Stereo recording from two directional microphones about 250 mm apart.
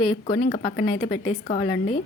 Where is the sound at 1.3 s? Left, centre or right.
Left.